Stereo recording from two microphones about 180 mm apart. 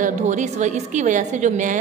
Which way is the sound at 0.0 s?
40° right (ahead or behind).